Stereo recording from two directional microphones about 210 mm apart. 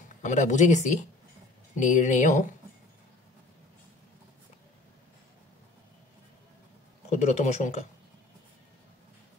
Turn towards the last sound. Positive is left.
turn(degrees=35)  # may be behind; listen again after turning